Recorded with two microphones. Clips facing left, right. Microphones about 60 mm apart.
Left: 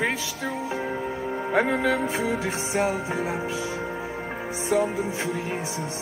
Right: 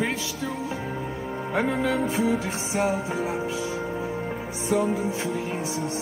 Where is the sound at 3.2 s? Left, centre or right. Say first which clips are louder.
Even; left.